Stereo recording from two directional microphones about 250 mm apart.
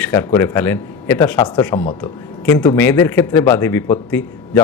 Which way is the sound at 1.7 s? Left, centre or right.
Left.